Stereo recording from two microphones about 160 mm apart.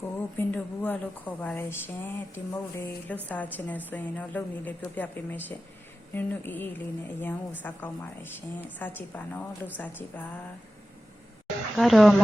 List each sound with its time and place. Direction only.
0.0 s a woman's voice: 10° left (ahead or behind)
11.8 s speech: centre (ahead or behind)